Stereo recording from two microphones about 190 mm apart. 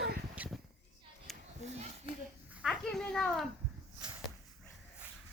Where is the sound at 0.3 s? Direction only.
10° right (ahead or behind).